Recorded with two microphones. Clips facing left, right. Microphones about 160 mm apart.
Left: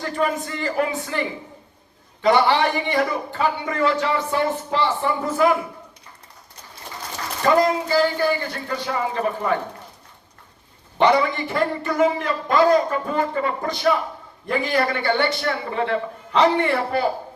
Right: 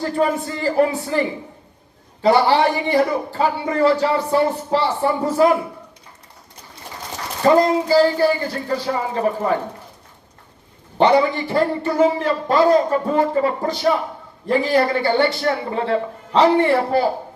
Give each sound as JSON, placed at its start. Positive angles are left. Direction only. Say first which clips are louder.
{"t": 0.0, "sound": "a man's voice", "louder": "right 4 dB", "side_deg": -30}
{"t": 2.2, "sound": "a man's voice", "louder": "right 3 dB", "side_deg": -35}
{"t": 7.4, "sound": "a man's voice", "louder": "right 4 dB", "side_deg": -30}
{"t": 10.9, "sound": "a man's voice", "louder": "right 3 dB", "side_deg": -35}